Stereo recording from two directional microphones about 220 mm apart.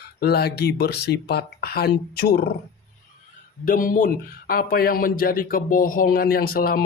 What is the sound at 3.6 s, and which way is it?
Speech, 40° left (ahead or behind).